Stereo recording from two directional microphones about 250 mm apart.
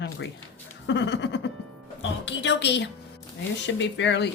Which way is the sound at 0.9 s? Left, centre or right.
Left.